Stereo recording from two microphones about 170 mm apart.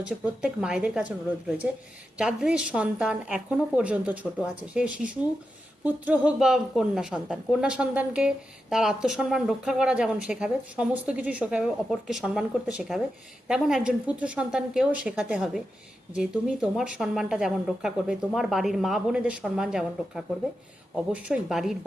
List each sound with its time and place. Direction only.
0.0 s a woman's voice: 5° right (ahead or behind)